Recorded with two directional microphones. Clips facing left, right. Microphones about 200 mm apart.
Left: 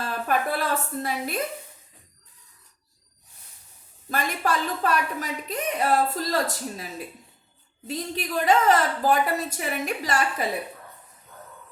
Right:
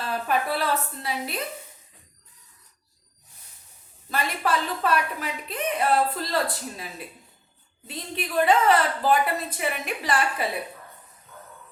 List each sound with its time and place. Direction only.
0.1 s a woman's voice: 50° left (ahead or behind)
4.1 s a woman's voice: 45° left (ahead or behind)
7.9 s a woman's voice: 40° left (ahead or behind)